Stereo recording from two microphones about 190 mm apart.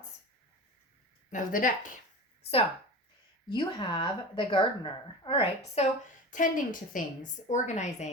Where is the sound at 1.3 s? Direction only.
45° left (ahead or behind).